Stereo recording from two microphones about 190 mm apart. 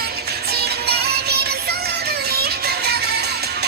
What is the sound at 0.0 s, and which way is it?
Music, 55° right (ahead or behind).